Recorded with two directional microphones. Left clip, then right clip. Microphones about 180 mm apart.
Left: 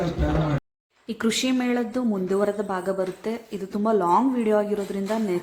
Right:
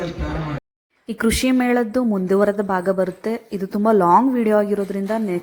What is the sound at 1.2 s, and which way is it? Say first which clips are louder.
A woman's voice: right 5 dB; 35° right (ahead or behind).